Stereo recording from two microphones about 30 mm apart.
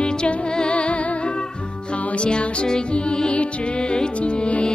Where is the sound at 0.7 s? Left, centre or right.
Left.